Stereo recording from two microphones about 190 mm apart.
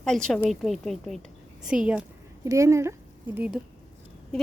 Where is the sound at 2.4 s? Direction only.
15° right (ahead or behind).